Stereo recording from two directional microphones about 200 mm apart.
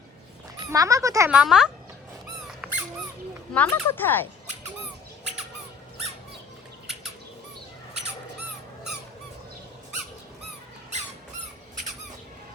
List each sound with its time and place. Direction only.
0.7 s speech: 15° right (ahead or behind)
1.3 s a child's voice: 5° right (ahead or behind)
2.6 s dog: 5° right (ahead or behind)
3.5 s speech: 10° left (ahead or behind)